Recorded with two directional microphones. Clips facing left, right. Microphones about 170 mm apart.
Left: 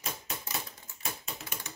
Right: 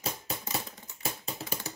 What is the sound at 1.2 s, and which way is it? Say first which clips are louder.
Typing: right 5 dB; 35° right (ahead or behind).